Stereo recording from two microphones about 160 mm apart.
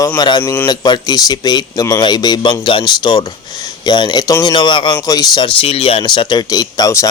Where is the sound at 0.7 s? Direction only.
25° left (ahead or behind).